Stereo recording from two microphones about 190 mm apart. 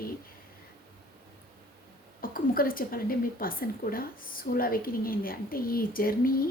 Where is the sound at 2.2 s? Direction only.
50° left (ahead or behind).